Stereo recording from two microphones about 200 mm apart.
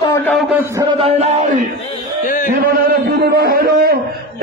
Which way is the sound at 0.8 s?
30° right (ahead or behind).